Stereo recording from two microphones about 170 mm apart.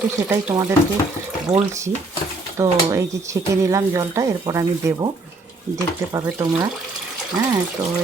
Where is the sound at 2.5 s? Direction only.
20° right (ahead or behind).